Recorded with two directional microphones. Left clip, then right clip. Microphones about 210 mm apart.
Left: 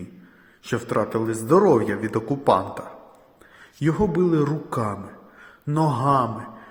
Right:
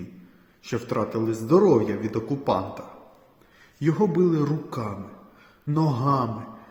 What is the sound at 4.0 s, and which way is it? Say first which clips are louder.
Speech: left 1 dB; 10° left (ahead or behind).